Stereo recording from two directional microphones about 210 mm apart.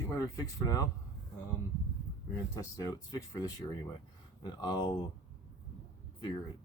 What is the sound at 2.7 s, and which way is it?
Speech, 15° left (ahead or behind).